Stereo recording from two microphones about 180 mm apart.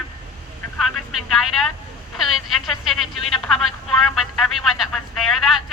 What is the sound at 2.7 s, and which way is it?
Speech, centre (ahead or behind).